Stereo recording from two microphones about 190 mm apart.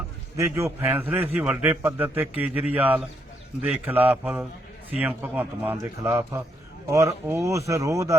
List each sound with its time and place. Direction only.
0.3 s a man's voice: 15° right (ahead or behind)